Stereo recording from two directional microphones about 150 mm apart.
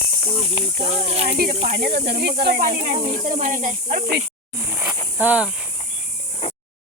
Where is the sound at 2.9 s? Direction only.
55° right (ahead or behind); by 4.2 s 75° right (ahead or behind).